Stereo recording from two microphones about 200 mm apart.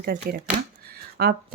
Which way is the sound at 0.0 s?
50° right (ahead or behind).